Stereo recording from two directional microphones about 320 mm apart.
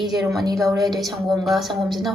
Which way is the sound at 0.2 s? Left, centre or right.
Centre.